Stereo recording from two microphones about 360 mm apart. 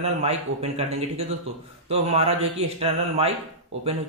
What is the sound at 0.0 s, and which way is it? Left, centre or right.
Speech, centre.